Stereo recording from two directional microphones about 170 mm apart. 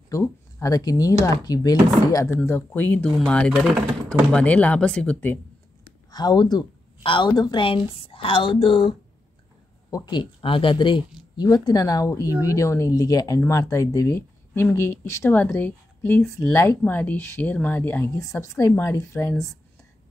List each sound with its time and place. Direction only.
0.1 s speech: 20° left (ahead or behind); by 3.8 s 5° right (ahead or behind)
4.3 s speech: 10° left (ahead or behind)
6.1 s a woman's voice: 25° left (ahead or behind)